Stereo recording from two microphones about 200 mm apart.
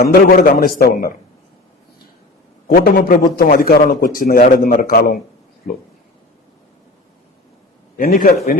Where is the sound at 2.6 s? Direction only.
45° left (ahead or behind).